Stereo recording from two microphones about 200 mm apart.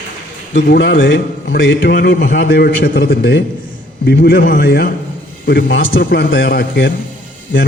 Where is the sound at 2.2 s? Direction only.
65° left (ahead or behind).